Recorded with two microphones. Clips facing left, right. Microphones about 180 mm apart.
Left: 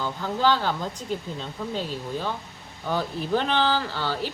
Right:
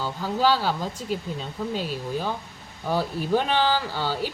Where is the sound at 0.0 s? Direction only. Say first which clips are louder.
Right 1 dB; 5° right (ahead or behind).